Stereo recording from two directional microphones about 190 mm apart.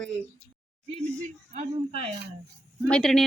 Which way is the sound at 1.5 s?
35° right (ahead or behind).